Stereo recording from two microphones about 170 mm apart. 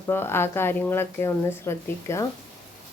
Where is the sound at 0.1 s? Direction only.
15° left (ahead or behind).